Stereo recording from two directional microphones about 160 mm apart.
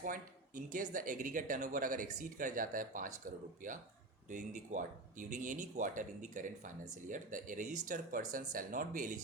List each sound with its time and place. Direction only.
0.0 s speech: 60° right (ahead or behind)